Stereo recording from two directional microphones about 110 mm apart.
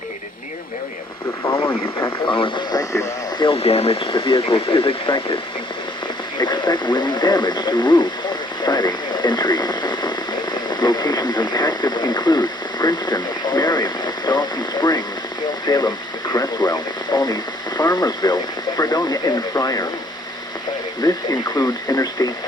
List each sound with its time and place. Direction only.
1.6 s speech: 20° left (ahead or behind)
2.2 s speech: 50° left (ahead or behind)
2.7 s speech: 30° left (ahead or behind)
3.3 s speech: 55° left (ahead or behind)
6.4 s speech: 45° left (ahead or behind)
21.0 s speech: 35° left (ahead or behind)